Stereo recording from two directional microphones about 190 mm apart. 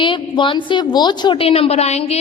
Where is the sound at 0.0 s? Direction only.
25° left (ahead or behind).